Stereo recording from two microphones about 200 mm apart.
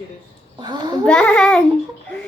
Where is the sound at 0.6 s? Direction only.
20° right (ahead or behind).